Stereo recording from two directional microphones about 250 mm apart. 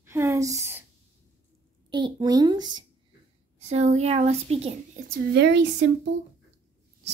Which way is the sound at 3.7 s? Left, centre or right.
Right.